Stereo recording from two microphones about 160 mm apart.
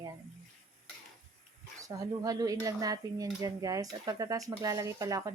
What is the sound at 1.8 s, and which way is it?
Speech, 20° right (ahead or behind).